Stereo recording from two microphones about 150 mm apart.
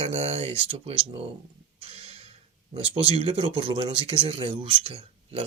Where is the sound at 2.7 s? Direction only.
40° right (ahead or behind).